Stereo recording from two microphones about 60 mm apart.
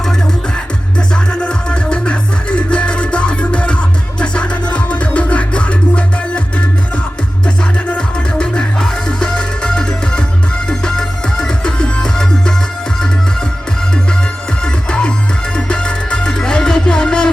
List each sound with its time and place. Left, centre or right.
0.9 s music: centre
14.6 s music: centre